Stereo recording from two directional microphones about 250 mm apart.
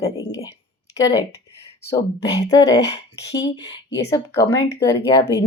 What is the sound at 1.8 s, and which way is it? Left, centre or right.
Speech, centre.